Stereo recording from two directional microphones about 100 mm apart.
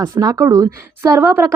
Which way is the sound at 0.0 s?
40° right (ahead or behind).